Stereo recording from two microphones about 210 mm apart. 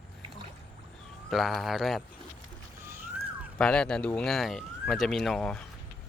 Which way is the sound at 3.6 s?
5° left (ahead or behind).